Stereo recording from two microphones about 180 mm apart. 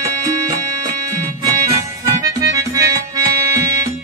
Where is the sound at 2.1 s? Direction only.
20° right (ahead or behind).